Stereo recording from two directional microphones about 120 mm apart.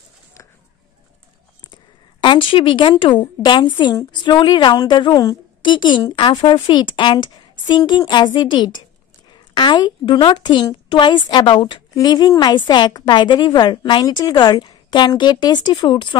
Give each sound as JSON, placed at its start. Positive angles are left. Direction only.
{"t": 2.2, "sound": "a woman's voice", "side_deg": 45}